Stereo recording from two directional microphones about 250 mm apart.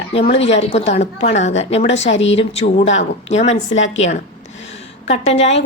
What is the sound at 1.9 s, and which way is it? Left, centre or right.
Speech, left.